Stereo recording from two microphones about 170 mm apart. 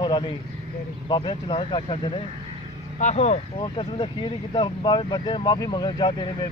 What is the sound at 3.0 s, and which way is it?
Speech, 45° left (ahead or behind).